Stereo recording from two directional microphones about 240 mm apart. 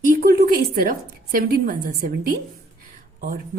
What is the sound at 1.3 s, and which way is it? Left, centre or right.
Speech, right.